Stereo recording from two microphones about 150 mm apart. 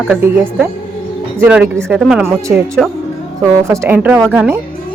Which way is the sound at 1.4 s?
10° right (ahead or behind).